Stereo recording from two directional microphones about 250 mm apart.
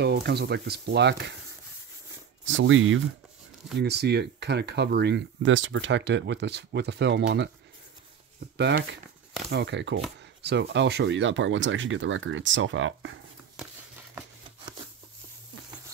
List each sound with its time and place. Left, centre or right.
0.0 s speech: right
2.4 s speech: right
8.5 s speech: right